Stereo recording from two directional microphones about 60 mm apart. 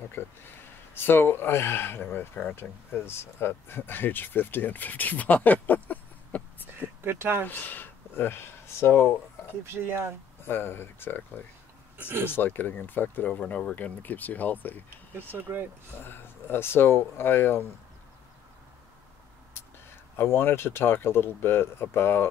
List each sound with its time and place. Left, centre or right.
0.2 s speech: left
7.0 s speech: right
7.4 s speech: left
9.7 s speech: right
10.4 s speech: left
13.4 s speech: centre
13.7 s speech: left
15.1 s speech: right
16.0 s speech: left
20.2 s speech: left